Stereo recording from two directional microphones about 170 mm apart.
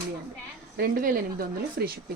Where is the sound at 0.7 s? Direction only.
60° right (ahead or behind).